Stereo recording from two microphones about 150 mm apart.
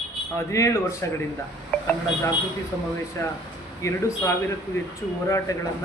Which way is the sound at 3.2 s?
15° left (ahead or behind).